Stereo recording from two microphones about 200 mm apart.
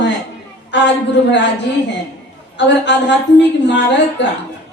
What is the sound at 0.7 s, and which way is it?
Speech, 60° left (ahead or behind).